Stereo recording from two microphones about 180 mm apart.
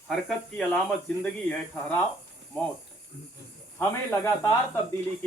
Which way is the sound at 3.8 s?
10° left (ahead or behind).